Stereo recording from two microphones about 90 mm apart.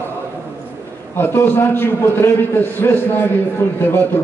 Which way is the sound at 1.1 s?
25° left (ahead or behind).